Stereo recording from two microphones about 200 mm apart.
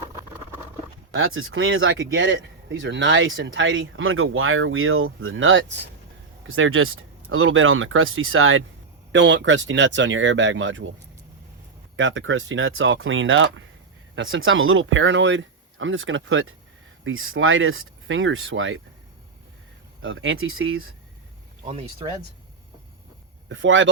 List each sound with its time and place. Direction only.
1.1 s speech: 80° right
6.5 s speech: 90° right
9.1 s speech: 65° right (ahead or behind)
11.9 s speech: 70° right (ahead or behind)
20.0 s speech: 75° right (ahead or behind)
21.6 s speech: 30° right (ahead or behind)
23.5 s speech: 70° right (ahead or behind)